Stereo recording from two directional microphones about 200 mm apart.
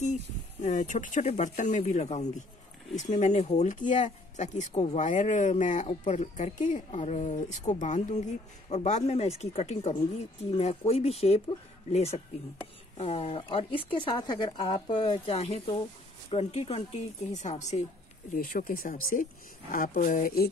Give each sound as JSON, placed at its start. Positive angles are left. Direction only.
{"t": 0.0, "sound": "speech", "side_deg": 35}